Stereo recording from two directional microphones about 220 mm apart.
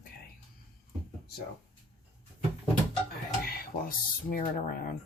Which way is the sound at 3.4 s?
45° left (ahead or behind).